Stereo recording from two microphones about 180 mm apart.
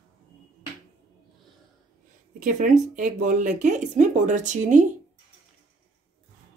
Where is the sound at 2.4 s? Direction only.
45° right (ahead or behind).